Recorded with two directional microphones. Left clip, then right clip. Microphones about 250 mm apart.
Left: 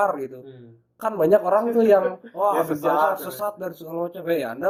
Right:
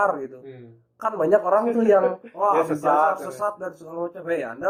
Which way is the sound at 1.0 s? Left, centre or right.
Left.